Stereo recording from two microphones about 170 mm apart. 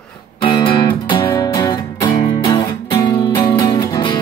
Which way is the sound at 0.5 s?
25° left (ahead or behind).